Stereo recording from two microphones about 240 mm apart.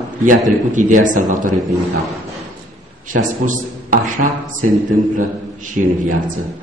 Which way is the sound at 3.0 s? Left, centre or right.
Right.